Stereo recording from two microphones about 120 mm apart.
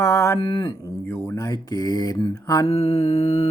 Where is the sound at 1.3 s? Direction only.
30° left (ahead or behind).